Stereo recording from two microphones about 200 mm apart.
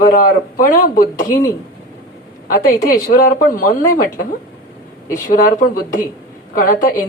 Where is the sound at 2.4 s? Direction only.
45° left (ahead or behind).